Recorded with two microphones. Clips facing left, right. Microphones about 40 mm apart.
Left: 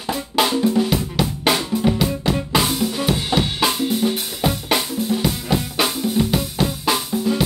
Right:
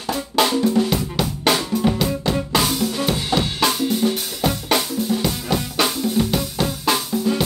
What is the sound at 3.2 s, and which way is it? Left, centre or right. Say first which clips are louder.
Drum kit: even; left.